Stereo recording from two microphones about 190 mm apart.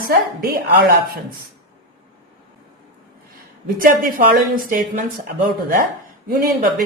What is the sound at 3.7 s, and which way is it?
Speech, 50° right (ahead or behind).